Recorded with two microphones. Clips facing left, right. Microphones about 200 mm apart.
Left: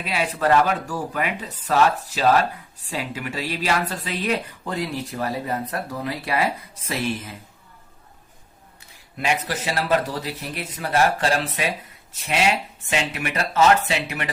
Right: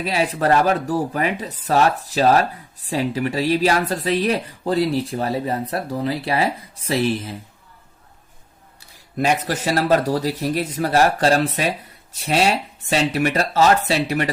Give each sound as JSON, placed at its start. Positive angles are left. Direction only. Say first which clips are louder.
{"t": 0.0, "sound": "speech", "louder": "right 3 dB", "side_deg": -35}
{"t": 8.9, "sound": "speech", "louder": "right 5 dB", "side_deg": -40}